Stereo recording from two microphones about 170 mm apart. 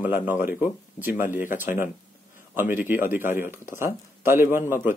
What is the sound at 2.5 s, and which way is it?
Speech, 10° right (ahead or behind).